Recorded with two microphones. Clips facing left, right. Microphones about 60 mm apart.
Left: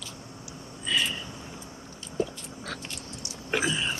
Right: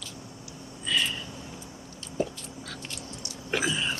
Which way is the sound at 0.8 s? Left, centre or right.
Centre.